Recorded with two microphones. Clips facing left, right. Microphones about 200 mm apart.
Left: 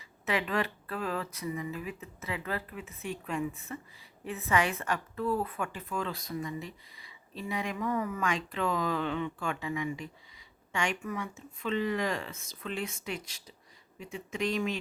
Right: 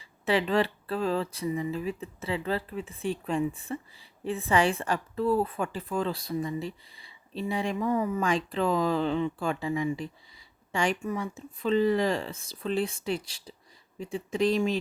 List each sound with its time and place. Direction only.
0.3 s a woman's voice: 30° right (ahead or behind)